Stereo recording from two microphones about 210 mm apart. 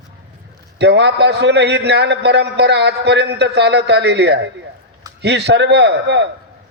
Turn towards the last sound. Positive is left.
turn(degrees=-55)  # may be behind; listen again after turning